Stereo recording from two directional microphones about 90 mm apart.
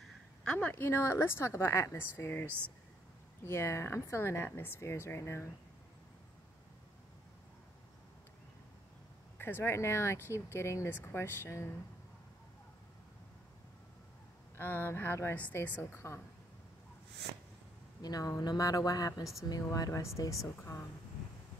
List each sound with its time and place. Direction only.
0.4 s speech: 15° left (ahead or behind)
0.7 s speech: 25° left (ahead or behind)
3.4 s speech: 30° left (ahead or behind)
9.4 s speech: 25° left (ahead or behind)
14.6 s speech: 25° left (ahead or behind)
18.0 s speech: 45° left (ahead or behind)